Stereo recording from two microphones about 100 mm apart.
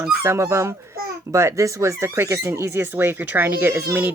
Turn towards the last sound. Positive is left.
turn(degrees=-20)  # may be behind; listen again after turning